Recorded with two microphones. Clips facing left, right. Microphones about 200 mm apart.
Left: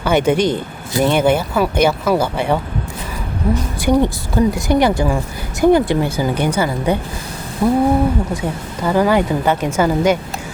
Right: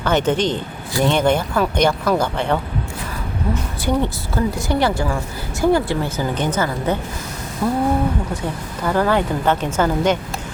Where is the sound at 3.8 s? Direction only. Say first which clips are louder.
Left 6 dB; 15° left (ahead or behind).